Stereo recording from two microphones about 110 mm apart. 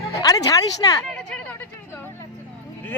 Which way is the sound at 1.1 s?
10° left (ahead or behind).